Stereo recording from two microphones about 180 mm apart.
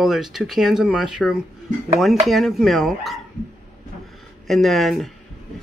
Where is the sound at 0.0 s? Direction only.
Centre (ahead or behind).